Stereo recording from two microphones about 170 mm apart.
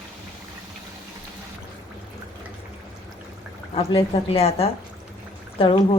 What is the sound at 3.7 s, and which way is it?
A woman's voice, 35° left (ahead or behind).